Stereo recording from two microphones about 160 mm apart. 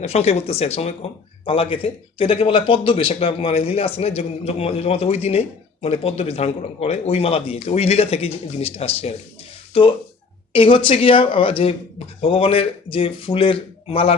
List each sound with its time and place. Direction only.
0.0 s a man's voice: 40° left (ahead or behind)